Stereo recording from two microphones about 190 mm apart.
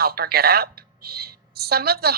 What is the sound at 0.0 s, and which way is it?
A woman's voice, 55° right (ahead or behind).